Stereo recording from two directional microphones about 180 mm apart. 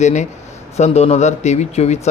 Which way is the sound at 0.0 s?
40° left (ahead or behind).